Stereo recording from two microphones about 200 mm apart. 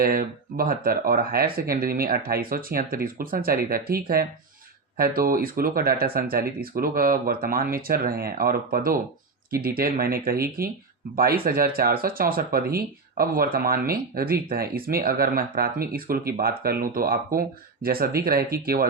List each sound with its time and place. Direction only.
0.0 s speech: 45° right (ahead or behind)